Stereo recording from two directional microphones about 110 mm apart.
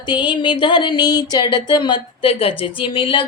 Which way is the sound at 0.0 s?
45° left (ahead or behind).